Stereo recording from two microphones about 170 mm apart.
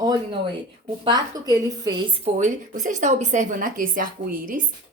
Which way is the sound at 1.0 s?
25° right (ahead or behind).